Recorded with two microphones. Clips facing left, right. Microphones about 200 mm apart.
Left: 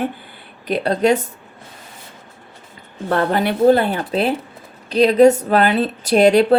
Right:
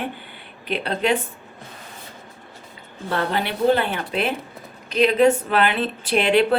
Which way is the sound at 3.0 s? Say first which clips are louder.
Left 6 dB; 45° left (ahead or behind).